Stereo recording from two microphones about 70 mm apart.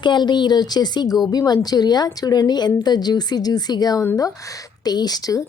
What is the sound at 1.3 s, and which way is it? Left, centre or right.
A woman's voice, left.